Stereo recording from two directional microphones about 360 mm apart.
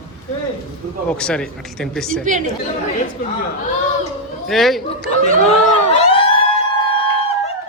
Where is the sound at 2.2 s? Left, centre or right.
Right.